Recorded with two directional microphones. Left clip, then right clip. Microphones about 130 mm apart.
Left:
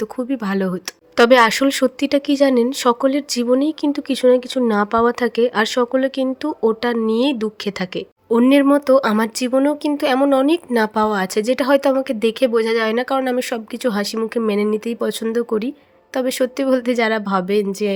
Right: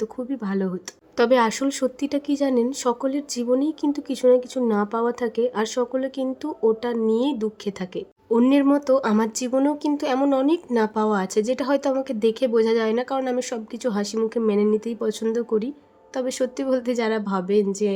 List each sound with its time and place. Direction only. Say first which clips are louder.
0.0 s speech: left 5 dB; 30° left (ahead or behind)